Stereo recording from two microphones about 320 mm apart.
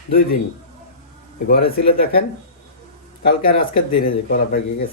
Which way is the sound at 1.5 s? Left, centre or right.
Left.